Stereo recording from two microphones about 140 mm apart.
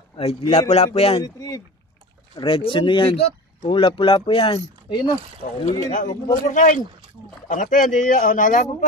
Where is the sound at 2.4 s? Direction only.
40° left (ahead or behind).